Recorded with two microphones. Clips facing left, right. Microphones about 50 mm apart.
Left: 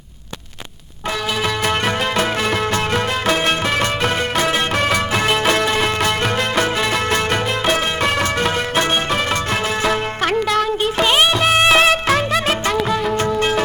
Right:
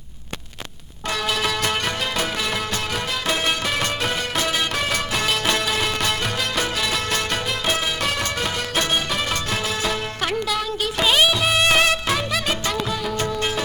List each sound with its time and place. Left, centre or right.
8.2 s music: left
10.2 s music: left
12.7 s music of bollywood: centre